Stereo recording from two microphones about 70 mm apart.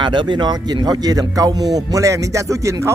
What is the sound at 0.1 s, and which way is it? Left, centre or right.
A man's voice, right.